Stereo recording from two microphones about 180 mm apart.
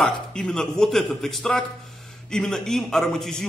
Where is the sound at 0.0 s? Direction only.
5° left (ahead or behind).